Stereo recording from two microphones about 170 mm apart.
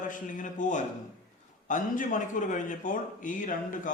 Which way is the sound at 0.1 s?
50° left (ahead or behind).